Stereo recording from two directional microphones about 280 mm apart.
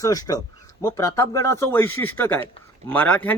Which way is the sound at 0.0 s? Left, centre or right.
Centre.